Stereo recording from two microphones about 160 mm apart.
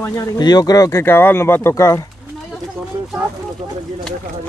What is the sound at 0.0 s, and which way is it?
Speech, 25° left (ahead or behind).